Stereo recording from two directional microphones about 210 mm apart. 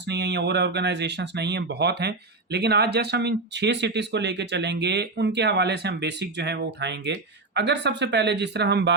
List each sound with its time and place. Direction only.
0.1 s speech: 55° right (ahead or behind)